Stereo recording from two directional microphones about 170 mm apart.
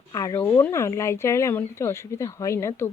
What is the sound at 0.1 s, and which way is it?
Speech, 20° left (ahead or behind).